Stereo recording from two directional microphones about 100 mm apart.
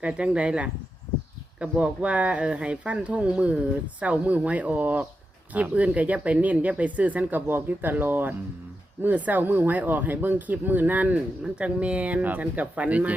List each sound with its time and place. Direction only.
0.0 s speech: 10° right (ahead or behind)